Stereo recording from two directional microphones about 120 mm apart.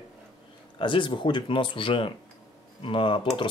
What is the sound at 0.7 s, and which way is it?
Speech, 45° left (ahead or behind).